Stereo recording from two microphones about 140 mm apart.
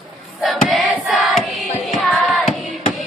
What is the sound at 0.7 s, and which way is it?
Crowd, centre (ahead or behind).